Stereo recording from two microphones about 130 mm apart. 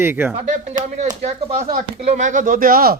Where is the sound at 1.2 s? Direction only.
55° right (ahead or behind); by 2.7 s 90° right.